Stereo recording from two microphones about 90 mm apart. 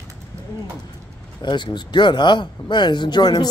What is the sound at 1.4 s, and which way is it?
Speech, 60° left (ahead or behind).